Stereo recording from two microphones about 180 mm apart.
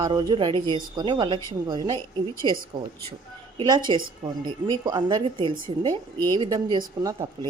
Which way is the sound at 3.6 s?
25° right (ahead or behind).